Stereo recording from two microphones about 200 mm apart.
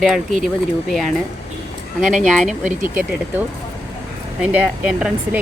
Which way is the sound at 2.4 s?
40° right (ahead or behind).